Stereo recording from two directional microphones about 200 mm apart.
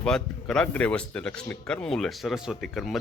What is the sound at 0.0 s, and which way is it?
Speech, 5° left (ahead or behind).